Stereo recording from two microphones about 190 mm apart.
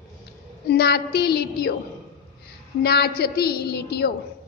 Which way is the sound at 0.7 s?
55° left (ahead or behind).